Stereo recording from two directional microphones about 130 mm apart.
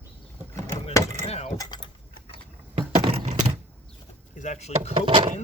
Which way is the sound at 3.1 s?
55° right (ahead or behind).